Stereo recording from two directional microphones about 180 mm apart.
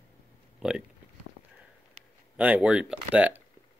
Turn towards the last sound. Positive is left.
turn(degrees=-10)  # may be behind; listen again after turning